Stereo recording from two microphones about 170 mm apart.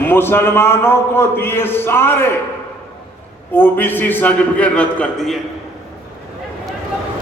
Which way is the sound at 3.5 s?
10° left (ahead or behind).